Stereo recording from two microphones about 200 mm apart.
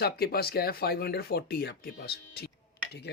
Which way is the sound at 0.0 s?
50° left (ahead or behind).